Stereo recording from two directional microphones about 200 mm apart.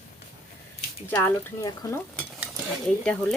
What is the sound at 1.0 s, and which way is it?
Stir, 10° left (ahead or behind).